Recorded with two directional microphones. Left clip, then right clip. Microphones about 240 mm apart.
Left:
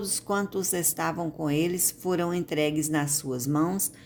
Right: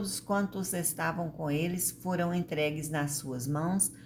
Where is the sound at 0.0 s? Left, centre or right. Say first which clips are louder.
Left 3 dB; left.